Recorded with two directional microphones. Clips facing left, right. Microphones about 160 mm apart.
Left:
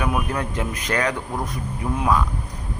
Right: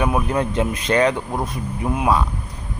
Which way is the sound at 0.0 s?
25° right (ahead or behind).